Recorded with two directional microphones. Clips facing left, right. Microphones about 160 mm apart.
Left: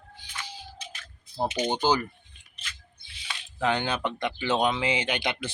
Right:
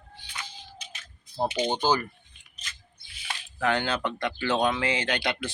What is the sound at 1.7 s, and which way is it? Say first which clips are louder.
Speech: left 2 dB; 15° left (ahead or behind).